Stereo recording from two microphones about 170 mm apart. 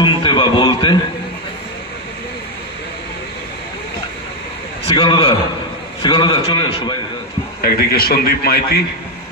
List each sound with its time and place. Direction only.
0.0 s speech: 25° left (ahead or behind)
4.8 s a man's voice: 30° left (ahead or behind)
7.6 s a man's voice: 65° left (ahead or behind)